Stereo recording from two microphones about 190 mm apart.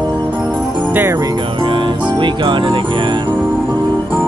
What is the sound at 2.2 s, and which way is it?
Music, 25° right (ahead or behind).